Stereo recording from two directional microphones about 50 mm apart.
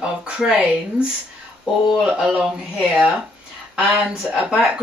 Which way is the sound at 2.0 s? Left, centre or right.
Centre.